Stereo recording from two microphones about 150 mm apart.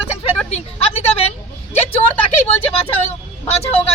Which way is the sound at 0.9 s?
40° left (ahead or behind).